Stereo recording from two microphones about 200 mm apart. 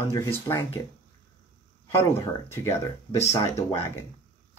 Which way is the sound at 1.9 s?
15° left (ahead or behind).